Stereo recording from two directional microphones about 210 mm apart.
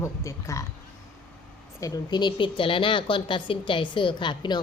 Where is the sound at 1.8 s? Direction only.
20° left (ahead or behind).